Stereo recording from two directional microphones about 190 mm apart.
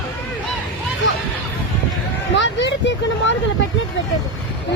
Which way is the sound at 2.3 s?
70° left (ahead or behind).